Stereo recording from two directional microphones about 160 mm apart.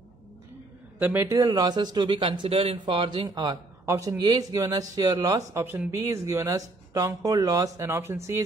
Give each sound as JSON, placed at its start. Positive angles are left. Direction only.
{"t": 0.9, "sound": "a man's voice", "side_deg": -15}